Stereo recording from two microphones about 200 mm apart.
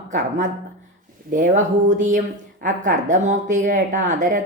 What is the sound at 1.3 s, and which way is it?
Speech, 40° right (ahead or behind).